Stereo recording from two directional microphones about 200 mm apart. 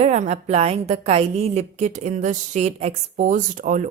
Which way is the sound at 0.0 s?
35° right (ahead or behind).